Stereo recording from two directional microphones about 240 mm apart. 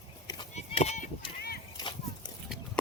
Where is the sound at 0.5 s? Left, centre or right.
Left.